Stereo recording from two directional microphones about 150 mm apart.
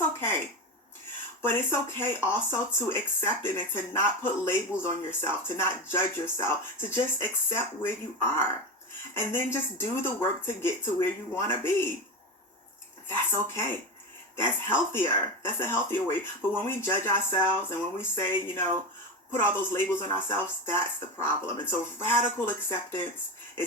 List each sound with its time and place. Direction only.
0.0 s a sound: 15° left (ahead or behind)
1.4 s speech: 15° left (ahead or behind)
13.1 s speech: 15° left (ahead or behind)